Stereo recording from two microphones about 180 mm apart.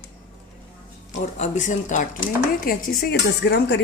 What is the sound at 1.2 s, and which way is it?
Speech, 40° left (ahead or behind).